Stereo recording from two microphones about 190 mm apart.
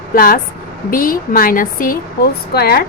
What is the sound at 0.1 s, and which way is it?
A woman's voice, 50° left (ahead or behind).